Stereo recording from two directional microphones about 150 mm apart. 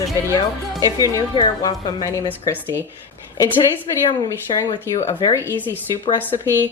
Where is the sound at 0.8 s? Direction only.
20° left (ahead or behind).